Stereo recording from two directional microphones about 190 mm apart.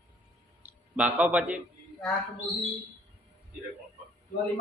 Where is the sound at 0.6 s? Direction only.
5° right (ahead or behind).